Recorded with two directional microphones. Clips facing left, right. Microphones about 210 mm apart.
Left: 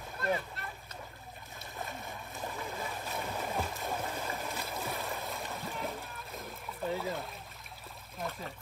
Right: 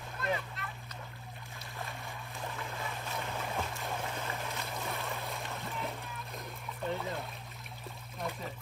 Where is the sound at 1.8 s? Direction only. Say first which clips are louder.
Left 2 dB; centre (ahead or behind).